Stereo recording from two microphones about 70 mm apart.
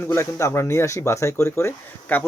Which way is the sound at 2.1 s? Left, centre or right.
Left.